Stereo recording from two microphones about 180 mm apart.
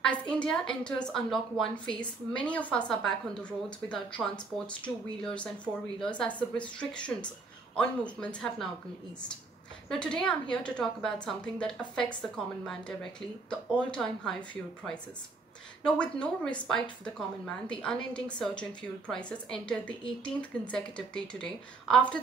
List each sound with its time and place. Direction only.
0.0 s a woman's voice: 5° left (ahead or behind)
9.8 s a woman's voice: 5° left (ahead or behind)